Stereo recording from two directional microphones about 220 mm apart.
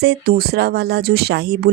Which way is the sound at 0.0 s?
45° right (ahead or behind).